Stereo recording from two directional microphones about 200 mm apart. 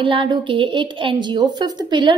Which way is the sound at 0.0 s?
25° right (ahead or behind).